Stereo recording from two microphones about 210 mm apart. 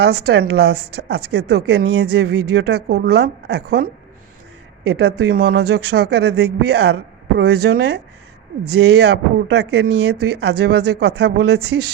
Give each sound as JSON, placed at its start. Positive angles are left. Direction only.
{"t": 0.3, "sound": "speech", "side_deg": -50}
{"t": 4.9, "sound": "speech", "side_deg": -50}